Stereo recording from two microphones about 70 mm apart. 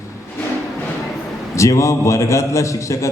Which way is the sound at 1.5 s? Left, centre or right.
Left.